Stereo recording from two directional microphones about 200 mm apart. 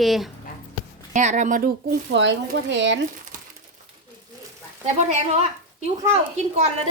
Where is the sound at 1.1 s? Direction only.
35° right (ahead or behind); by 3.0 s 65° right (ahead or behind).